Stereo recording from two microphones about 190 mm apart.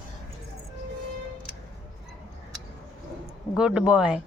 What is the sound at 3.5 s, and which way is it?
Speech, 5° right (ahead or behind).